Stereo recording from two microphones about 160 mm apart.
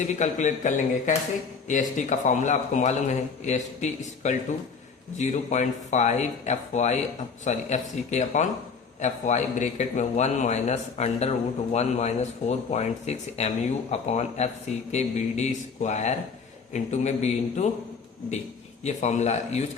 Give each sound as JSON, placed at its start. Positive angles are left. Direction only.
{"t": 0.0, "sound": "a man's voice", "side_deg": 45}
{"t": 18.8, "sound": "a man's voice", "side_deg": 50}